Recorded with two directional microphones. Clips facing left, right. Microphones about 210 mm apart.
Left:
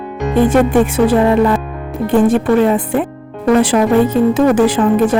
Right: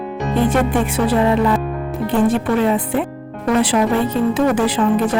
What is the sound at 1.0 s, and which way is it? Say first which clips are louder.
Speech: left 4 dB; 50° left (ahead or behind).